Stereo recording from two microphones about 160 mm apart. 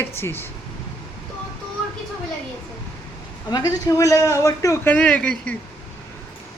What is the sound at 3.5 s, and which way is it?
A man's voice, 20° left (ahead or behind).